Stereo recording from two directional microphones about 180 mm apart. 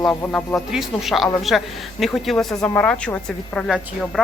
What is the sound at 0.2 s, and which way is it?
Speech, 10° left (ahead or behind).